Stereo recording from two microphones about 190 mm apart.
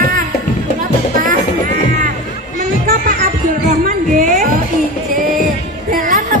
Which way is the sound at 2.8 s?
45° right (ahead or behind).